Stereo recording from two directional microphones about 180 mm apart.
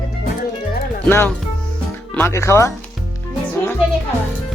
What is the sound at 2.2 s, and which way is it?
Music, 15° left (ahead or behind).